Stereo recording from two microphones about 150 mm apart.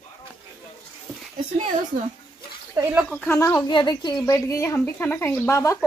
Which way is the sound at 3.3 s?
20° left (ahead or behind).